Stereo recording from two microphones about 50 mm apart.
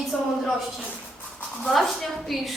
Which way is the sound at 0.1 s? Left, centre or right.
Left.